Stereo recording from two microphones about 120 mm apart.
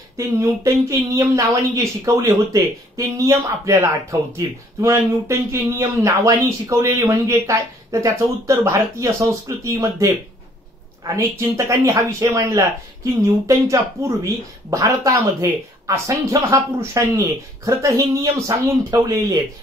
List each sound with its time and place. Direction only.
0.2 s speech: 25° right (ahead or behind)